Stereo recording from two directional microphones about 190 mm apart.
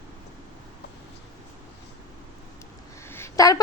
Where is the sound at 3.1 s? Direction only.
15° left (ahead or behind).